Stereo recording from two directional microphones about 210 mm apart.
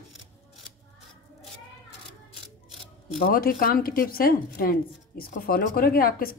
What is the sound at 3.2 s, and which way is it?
A woman's voice, 45° left (ahead or behind).